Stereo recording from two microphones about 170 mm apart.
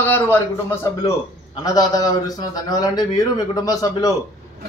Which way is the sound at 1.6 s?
20° left (ahead or behind).